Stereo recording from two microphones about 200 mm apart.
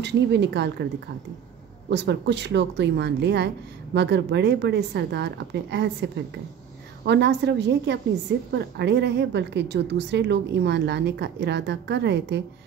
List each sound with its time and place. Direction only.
0.0 s speech: 60° right (ahead or behind)
1.9 s speech: 60° right (ahead or behind)